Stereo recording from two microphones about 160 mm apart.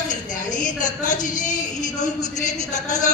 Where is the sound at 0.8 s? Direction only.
50° left (ahead or behind).